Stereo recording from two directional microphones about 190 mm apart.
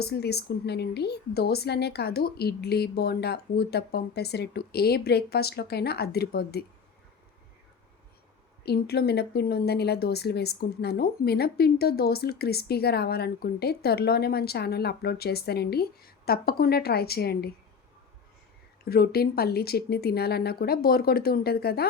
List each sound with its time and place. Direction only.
0.0 s speech: 60° left (ahead or behind)
8.6 s speech: 55° left (ahead or behind)
18.9 s speech: 55° left (ahead or behind)